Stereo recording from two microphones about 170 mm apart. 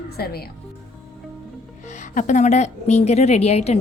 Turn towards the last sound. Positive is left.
turn(degrees=40)  # may be behind; listen again after turning